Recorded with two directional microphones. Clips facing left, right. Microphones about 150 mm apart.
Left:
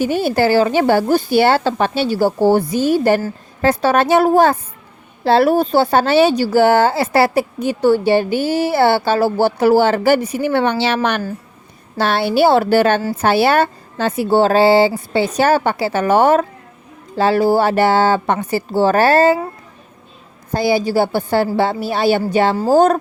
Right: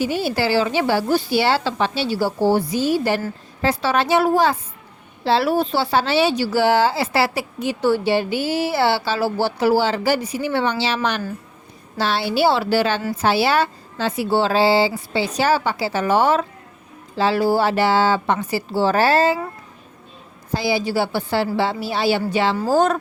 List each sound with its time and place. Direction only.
0.0 s speech: 50° left (ahead or behind)
20.5 s speech: 50° left (ahead or behind)